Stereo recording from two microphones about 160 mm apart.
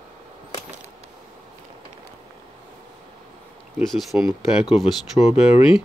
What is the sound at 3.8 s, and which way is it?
Speech, centre (ahead or behind).